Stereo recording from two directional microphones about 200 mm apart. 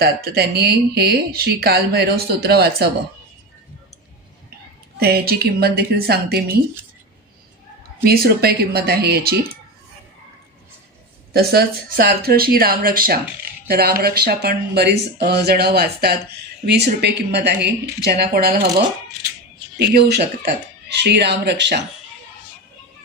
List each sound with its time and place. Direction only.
0.0 s speech: 50° right (ahead or behind)
4.9 s speech: 50° right (ahead or behind)
8.0 s speech: 50° right (ahead or behind)
11.3 s speech: 50° right (ahead or behind)
19.7 s speech: 55° right (ahead or behind)